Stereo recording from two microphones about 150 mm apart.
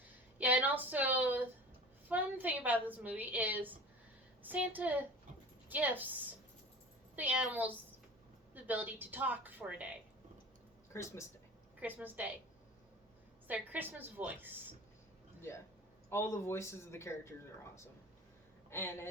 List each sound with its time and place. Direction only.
0.3 s a woman's voice: 10° right (ahead or behind)
7.2 s a woman's voice: 10° right (ahead or behind)
10.9 s speech: 15° left (ahead or behind)
11.8 s a woman's voice: 10° right (ahead or behind)
13.5 s a woman's voice: 10° right (ahead or behind)
15.4 s speech: 15° left (ahead or behind)
18.7 s speech: 15° left (ahead or behind)